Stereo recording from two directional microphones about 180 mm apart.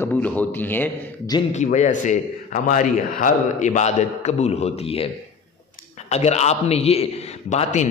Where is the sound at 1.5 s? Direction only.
40° left (ahead or behind).